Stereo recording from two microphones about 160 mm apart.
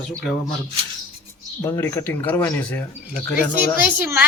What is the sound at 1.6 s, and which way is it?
Speech, 15° left (ahead or behind).